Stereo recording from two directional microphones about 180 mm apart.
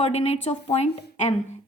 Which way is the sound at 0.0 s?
35° left (ahead or behind).